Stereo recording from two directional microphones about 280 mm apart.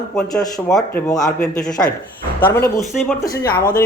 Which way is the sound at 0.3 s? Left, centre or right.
Centre.